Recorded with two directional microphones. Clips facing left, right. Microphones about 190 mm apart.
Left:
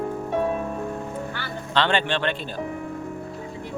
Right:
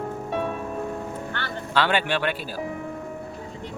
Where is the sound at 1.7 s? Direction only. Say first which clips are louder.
Even; 10° right (ahead or behind).